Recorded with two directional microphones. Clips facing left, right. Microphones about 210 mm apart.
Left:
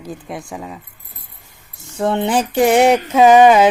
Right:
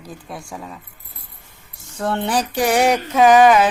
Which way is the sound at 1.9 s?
20° left (ahead or behind).